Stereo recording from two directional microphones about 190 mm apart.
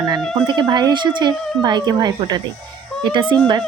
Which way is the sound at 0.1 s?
25° right (ahead or behind).